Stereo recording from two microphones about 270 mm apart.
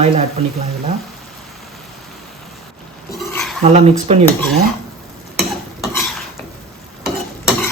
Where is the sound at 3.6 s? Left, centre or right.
Right.